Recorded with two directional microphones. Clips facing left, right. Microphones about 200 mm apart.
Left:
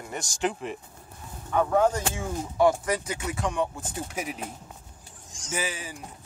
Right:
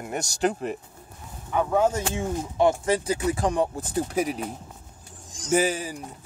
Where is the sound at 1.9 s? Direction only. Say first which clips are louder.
Right 3 dB; 25° right (ahead or behind).